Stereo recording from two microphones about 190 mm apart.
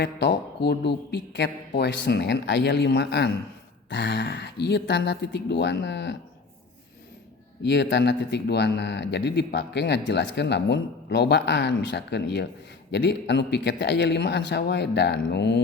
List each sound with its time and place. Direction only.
0.0 s speech: 65° left (ahead or behind)
7.6 s speech: 65° left (ahead or behind)